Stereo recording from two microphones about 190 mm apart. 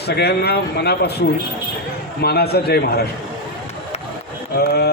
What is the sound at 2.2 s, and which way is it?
Speech, 55° left (ahead or behind).